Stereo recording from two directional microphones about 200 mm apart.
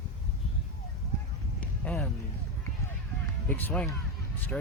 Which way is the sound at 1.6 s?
5° left (ahead or behind).